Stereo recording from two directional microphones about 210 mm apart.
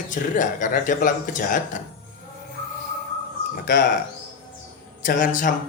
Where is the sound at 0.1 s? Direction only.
35° left (ahead or behind).